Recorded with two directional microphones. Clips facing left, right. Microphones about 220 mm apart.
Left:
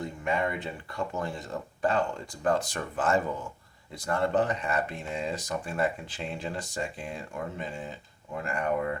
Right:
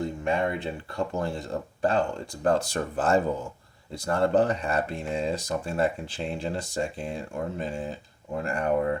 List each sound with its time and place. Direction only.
0.3 s speech: 30° right (ahead or behind)